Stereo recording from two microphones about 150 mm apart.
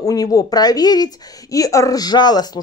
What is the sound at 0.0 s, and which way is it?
Speech, 25° left (ahead or behind).